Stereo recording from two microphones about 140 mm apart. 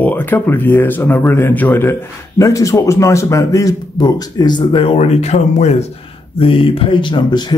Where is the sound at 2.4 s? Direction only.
25° left (ahead or behind); by 5.7 s 50° left (ahead or behind).